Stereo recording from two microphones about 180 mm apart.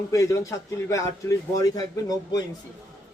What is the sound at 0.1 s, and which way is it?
A man's voice, 15° left (ahead or behind).